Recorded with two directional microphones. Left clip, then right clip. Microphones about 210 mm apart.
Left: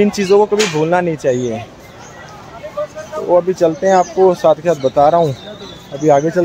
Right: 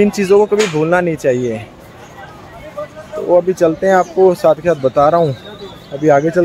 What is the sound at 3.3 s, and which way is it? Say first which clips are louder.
Speech: right 1 dB; 5° right (ahead or behind).